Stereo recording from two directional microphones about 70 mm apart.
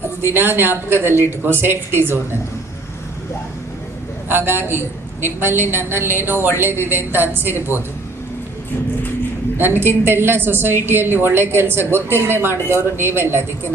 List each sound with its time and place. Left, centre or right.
0.3 s a woman's voice: right
4.3 s a woman's voice: right
9.6 s a woman's voice: right